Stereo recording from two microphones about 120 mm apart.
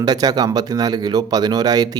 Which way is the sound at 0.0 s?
35° right (ahead or behind).